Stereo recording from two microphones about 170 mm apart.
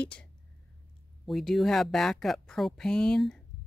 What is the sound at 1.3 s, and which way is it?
Speech, centre (ahead or behind).